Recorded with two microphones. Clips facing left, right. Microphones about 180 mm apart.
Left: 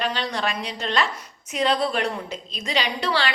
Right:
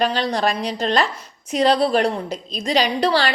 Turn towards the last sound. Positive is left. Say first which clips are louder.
# right 6 dB
turn(degrees=-35)  # may be behind; listen again after turning